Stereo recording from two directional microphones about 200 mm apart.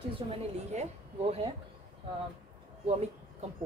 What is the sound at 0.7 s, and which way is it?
Speech, 35° right (ahead or behind).